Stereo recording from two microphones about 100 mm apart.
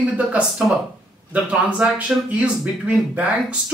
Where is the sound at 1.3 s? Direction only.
15° right (ahead or behind).